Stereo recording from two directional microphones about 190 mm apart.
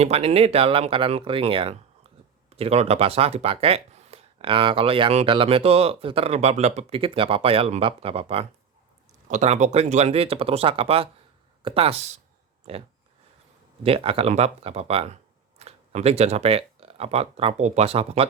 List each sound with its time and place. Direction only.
0.0 s speech: 35° right (ahead or behind)
13.8 s speech: 30° right (ahead or behind)